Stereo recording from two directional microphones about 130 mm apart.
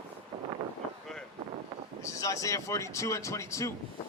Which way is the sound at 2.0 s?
25° left (ahead or behind).